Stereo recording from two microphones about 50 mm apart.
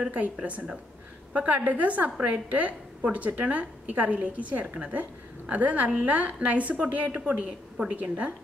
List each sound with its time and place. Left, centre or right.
0.4 s a woman's voice: right
1.3 s a woman's voice: right